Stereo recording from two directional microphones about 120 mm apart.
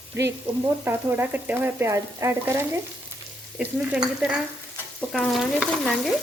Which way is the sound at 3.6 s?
10° right (ahead or behind).